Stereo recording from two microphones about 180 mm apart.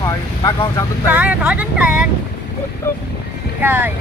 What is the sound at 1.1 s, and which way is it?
Speech, 10° right (ahead or behind).